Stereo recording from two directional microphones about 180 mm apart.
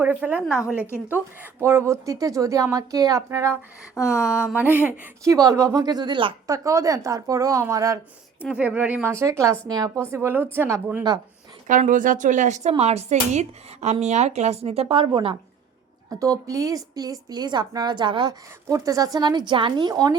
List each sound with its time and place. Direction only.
0.0 s speech: 10° right (ahead or behind)
0.9 s speech: 15° left (ahead or behind)
1.1 s speech: 15° right (ahead or behind)
3.9 s speech: 15° left (ahead or behind)
4.3 s a woman's voice: 5° right (ahead or behind)
11.7 s a woman's voice: 45° right (ahead or behind); by 20.1 s 20° right (ahead or behind)